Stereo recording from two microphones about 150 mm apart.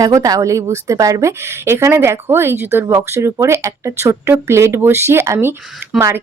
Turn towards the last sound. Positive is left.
turn(degrees=-20)  # may be behind; listen again after turning